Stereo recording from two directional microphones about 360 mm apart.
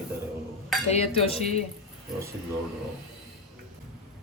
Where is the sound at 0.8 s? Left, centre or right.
Centre.